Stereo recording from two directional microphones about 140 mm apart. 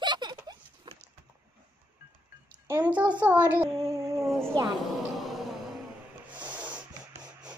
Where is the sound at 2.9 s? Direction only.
10° right (ahead or behind).